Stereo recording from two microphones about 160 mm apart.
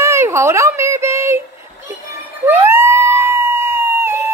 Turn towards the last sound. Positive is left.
turn(degrees=-15)  # may be behind; listen again after turning